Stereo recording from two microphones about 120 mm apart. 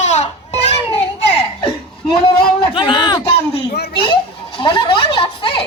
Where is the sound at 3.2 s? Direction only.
50° left (ahead or behind).